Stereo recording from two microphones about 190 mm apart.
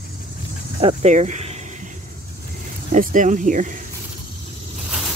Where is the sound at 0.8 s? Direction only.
35° right (ahead or behind).